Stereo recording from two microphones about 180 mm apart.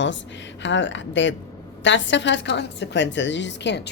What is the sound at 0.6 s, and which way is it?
A woman's voice, 90° left.